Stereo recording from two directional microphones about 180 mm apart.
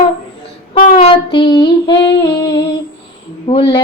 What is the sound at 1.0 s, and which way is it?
Child singing, 30° left (ahead or behind).